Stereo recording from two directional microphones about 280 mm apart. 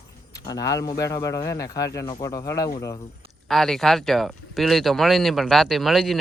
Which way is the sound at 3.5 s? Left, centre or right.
Centre.